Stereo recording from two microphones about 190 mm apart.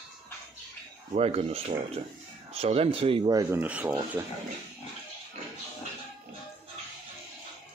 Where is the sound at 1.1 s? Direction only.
30° right (ahead or behind); by 4.3 s 10° right (ahead or behind).